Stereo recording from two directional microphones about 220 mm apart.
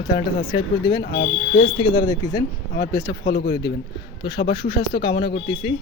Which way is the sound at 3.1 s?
50° left (ahead or behind).